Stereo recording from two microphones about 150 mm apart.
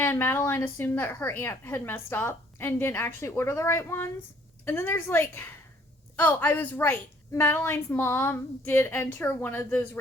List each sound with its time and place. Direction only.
0.0 s a woman's voice: 15° left (ahead or behind)